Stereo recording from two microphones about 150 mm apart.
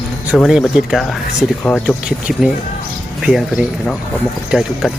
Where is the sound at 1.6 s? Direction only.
10° left (ahead or behind).